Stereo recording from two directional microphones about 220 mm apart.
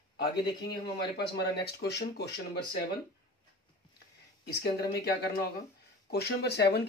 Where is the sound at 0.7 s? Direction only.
45° left (ahead or behind).